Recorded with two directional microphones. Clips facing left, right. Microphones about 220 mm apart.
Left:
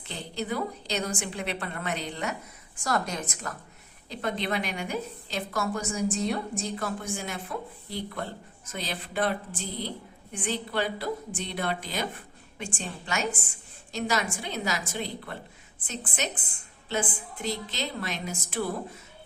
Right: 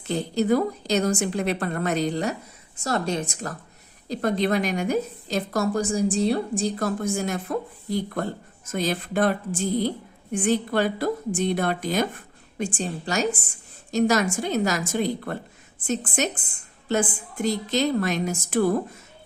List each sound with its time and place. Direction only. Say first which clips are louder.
0.1 s a woman's voice: right 11 dB; 45° right (ahead or behind)
2.7 s a woman's voice: right 4 dB; 25° right (ahead or behind)
4.1 s a woman's voice: right 8 dB; 40° right (ahead or behind)